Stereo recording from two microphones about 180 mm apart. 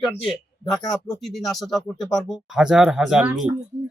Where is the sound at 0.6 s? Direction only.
25° left (ahead or behind).